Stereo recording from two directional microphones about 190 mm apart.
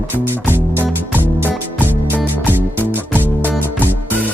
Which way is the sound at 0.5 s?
10° right (ahead or behind).